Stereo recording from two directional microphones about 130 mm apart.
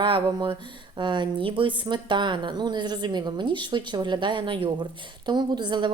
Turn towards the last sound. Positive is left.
turn(degrees=-35)  # may be behind; listen again after turning